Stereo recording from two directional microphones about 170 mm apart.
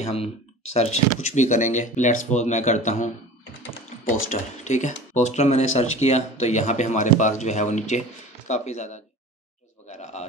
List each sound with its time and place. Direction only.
0.0 s speech: 35° left (ahead or behind)
4.1 s speech: 45° left (ahead or behind)